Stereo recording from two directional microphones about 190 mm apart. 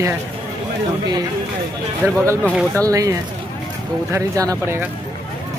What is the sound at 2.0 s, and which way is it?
Speech, 15° right (ahead or behind).